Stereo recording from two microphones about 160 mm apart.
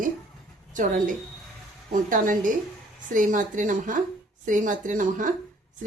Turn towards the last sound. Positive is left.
turn(degrees=-55)  # may be behind; listen again after turning